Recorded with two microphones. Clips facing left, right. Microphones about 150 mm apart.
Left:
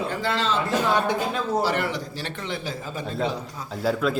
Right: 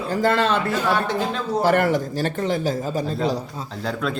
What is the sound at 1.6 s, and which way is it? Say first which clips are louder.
A man's voice: right 7 dB; 50° right (ahead or behind).